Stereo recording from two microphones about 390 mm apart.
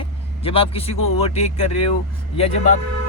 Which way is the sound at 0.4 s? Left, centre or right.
Centre.